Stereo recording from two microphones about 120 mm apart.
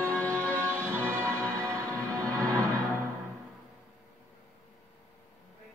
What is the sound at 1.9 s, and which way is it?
Music, 10° left (ahead or behind).